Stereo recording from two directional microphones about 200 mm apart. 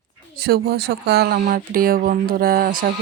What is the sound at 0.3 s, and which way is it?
Speech, 50° right (ahead or behind).